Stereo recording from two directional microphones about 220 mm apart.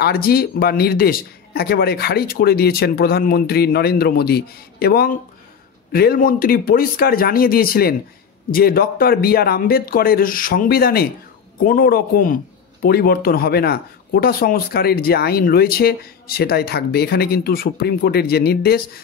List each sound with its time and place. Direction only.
0.0 s speech: 45° left (ahead or behind)